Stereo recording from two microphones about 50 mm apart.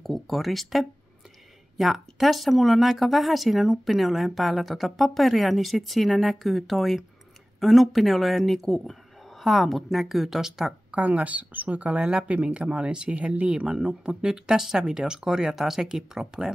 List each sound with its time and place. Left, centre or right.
0.0 s speech: centre
10.9 s speech: right; by 16.5 s centre